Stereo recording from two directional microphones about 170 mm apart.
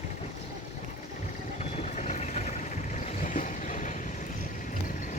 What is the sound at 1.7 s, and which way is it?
Vehicle, 40° left (ahead or behind).